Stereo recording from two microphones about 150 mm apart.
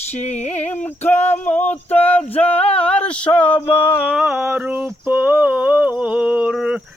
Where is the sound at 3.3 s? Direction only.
35° left (ahead or behind).